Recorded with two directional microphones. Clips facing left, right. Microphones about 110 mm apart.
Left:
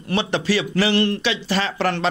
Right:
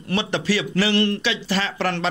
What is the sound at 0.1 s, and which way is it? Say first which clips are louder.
Speech: left 2 dB; 25° left (ahead or behind).